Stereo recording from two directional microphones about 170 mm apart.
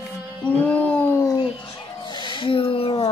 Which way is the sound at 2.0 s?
25° left (ahead or behind).